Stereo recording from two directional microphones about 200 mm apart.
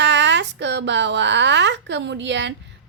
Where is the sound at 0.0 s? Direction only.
60° right (ahead or behind).